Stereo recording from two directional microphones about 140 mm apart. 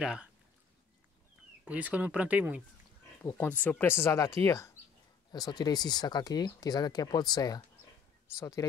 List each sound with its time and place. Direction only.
0.0 s speech: 5° right (ahead or behind)
1.6 s speech: 10° right (ahead or behind)
3.3 s speech: 10° left (ahead or behind)